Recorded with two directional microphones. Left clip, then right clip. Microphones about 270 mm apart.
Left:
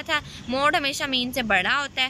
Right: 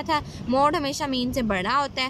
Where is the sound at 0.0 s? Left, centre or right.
Centre.